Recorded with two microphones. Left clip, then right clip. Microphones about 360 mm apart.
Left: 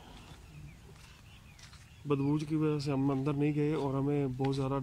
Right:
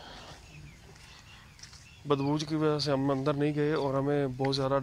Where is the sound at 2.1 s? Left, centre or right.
Centre.